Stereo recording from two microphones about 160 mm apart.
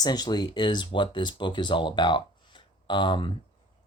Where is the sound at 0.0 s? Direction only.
25° left (ahead or behind).